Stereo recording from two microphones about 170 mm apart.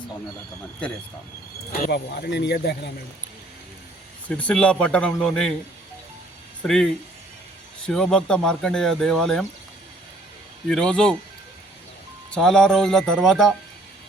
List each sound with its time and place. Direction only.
1.9 s speech: 70° left (ahead or behind)
4.3 s a man's voice: 5° left (ahead or behind)
6.7 s speech: centre (ahead or behind)
10.7 s speech: 5° left (ahead or behind)
12.3 s speech: 5° left (ahead or behind)